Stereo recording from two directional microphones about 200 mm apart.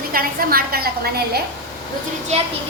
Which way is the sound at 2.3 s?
30° right (ahead or behind).